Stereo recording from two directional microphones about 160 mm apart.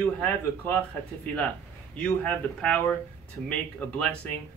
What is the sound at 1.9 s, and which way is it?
Speech, 5° left (ahead or behind).